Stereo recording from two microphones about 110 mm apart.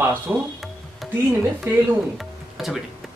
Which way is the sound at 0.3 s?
25° right (ahead or behind).